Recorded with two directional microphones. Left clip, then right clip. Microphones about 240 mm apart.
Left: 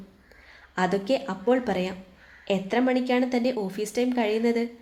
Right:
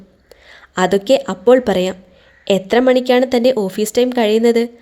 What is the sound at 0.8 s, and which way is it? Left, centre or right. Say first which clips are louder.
A woman's voice: right 11 dB; right.